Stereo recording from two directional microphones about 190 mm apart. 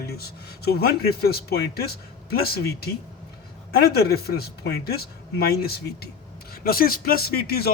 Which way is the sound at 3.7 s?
55° left (ahead or behind).